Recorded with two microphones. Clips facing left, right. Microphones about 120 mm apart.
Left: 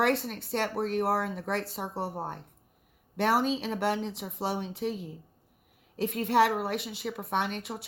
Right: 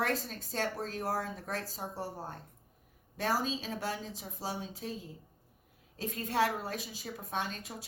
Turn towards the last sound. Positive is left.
turn(degrees=70)  # may be behind; listen again after turning